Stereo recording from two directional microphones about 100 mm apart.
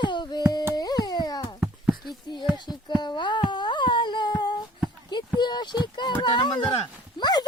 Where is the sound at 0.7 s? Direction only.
40° left (ahead or behind).